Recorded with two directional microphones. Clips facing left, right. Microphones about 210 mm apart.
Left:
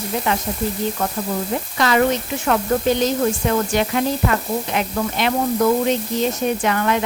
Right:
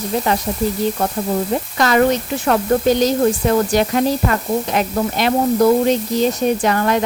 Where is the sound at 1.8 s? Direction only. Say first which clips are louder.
Right 2 dB; 45° right (ahead or behind).